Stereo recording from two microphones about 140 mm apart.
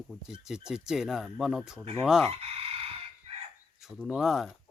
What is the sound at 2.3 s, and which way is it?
Chicken, 45° right (ahead or behind).